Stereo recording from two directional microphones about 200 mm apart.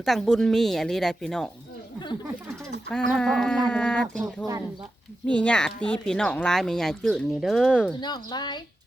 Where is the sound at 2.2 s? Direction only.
5° right (ahead or behind).